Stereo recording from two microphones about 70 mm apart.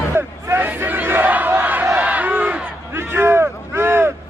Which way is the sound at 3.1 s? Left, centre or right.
Right.